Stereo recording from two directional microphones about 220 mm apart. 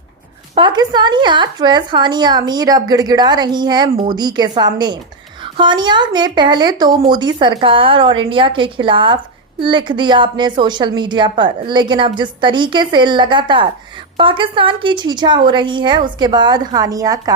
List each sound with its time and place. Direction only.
0.5 s a woman's voice: 20° right (ahead or behind)